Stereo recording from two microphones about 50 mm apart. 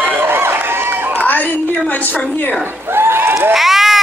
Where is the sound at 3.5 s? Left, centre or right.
Centre.